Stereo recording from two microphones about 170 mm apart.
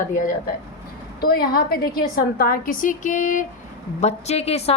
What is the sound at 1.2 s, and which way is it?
A woman's voice, 65° left (ahead or behind).